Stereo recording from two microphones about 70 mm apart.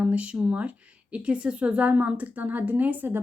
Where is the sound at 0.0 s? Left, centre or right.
Centre.